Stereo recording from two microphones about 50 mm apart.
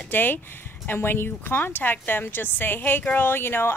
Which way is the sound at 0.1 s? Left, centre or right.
Left.